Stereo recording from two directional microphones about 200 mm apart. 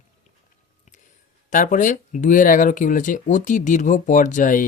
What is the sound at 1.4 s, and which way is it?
Speech, 40° left (ahead or behind).